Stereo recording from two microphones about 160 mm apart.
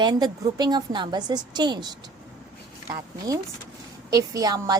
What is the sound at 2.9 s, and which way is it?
A woman's voice, 20° right (ahead or behind).